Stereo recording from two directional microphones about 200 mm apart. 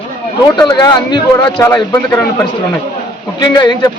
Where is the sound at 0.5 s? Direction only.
20° left (ahead or behind).